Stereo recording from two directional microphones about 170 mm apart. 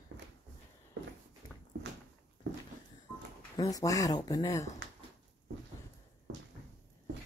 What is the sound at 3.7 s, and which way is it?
Speech, 20° left (ahead or behind).